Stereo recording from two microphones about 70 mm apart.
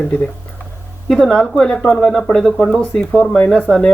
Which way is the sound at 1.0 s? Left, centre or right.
Centre.